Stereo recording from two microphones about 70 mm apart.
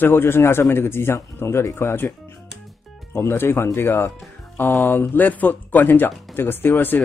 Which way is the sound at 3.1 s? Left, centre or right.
Left.